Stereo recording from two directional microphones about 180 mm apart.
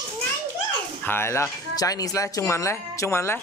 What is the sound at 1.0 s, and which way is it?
Speech, 15° left (ahead or behind).